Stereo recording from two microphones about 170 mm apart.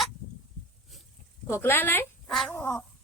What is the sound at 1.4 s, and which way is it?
Speech, 15° left (ahead or behind).